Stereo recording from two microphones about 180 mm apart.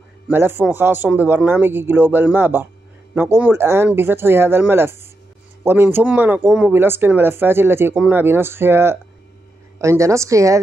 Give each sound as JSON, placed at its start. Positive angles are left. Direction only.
{"t": 0.3, "sound": "speech", "side_deg": -10}